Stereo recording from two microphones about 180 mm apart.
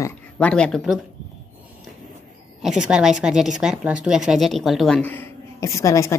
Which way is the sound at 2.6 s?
5° right (ahead or behind).